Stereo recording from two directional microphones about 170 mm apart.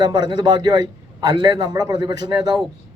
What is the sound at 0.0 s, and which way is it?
Speech, 25° right (ahead or behind).